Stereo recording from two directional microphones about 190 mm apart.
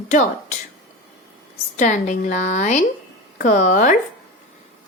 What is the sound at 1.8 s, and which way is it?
A woman's voice, 40° left (ahead or behind).